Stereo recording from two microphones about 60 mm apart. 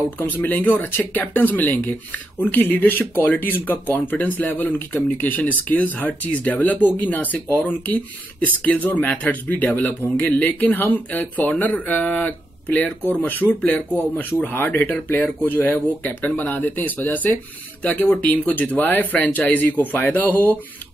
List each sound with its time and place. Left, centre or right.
0.2 s speech: left
14.7 s speech: left